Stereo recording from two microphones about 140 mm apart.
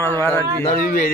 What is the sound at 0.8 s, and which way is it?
Speech, 90° left.